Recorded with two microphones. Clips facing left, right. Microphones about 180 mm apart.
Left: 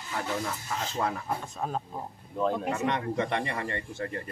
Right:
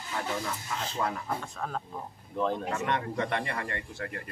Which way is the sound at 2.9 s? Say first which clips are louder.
Left 1 dB; 20° left (ahead or behind).